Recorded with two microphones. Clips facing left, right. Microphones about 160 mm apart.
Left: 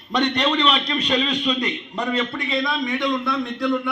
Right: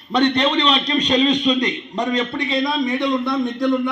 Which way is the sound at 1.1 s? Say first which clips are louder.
Right 6 dB; 15° right (ahead or behind).